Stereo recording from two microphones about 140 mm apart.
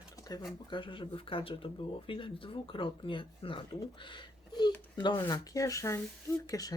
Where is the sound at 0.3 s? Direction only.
25° left (ahead or behind).